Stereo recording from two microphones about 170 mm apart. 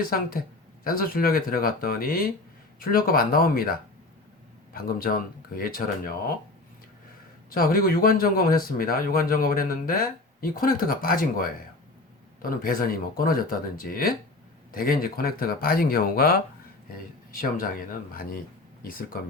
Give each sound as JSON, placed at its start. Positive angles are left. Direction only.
{"t": 0.0, "sound": "speech", "side_deg": 60}
{"t": 7.5, "sound": "speech", "side_deg": 55}
{"t": 18.8, "sound": "speech", "side_deg": 60}